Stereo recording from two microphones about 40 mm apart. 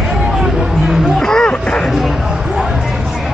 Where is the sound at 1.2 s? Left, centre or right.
Centre.